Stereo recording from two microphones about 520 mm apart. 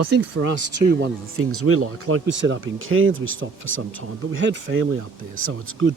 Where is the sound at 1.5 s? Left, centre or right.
Right.